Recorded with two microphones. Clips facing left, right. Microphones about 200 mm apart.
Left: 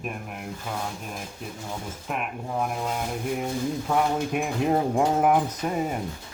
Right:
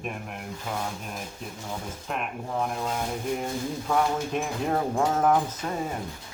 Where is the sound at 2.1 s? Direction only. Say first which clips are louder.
Left 1 dB; 5° left (ahead or behind).